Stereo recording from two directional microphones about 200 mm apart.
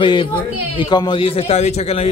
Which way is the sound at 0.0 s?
25° left (ahead or behind).